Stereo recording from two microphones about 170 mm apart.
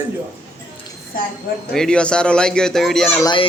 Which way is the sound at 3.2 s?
30° left (ahead or behind).